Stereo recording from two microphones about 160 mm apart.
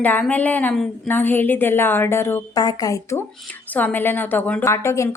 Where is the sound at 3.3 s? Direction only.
5° left (ahead or behind).